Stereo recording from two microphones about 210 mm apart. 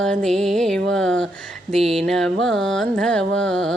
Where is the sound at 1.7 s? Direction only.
30° right (ahead or behind).